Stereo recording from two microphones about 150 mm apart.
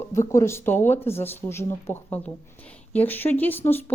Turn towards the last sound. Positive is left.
turn(degrees=15)  # may be behind; listen again after turning